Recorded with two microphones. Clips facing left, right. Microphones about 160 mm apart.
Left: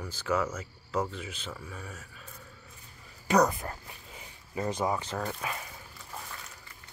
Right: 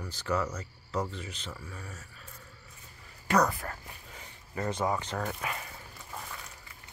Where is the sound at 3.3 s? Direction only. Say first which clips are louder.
Left 2 dB; 15° left (ahead or behind).